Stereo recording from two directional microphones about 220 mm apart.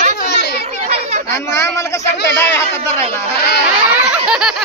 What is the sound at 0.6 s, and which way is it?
Children playing, 30° right (ahead or behind).